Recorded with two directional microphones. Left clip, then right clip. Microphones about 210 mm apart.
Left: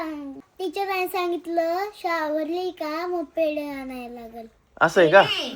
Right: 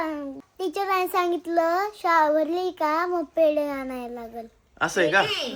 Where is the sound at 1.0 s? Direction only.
Centre (ahead or behind).